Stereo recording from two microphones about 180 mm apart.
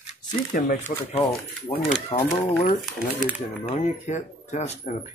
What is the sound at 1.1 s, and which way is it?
Speech, 30° left (ahead or behind).